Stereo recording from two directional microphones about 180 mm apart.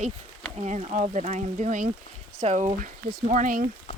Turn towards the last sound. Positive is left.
turn(degrees=35)  # may be behind; listen again after turning